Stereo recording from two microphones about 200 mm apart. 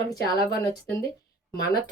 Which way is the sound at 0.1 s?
20° left (ahead or behind).